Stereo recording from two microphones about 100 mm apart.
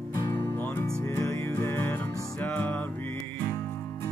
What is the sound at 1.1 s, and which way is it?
Music, 25° left (ahead or behind).